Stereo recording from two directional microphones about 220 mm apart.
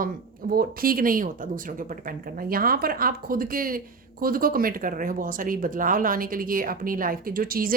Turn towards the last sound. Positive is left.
turn(degrees=-40)  # may be behind; listen again after turning